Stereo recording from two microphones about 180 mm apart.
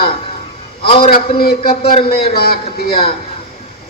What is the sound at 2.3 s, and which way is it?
Speech, 60° left (ahead or behind).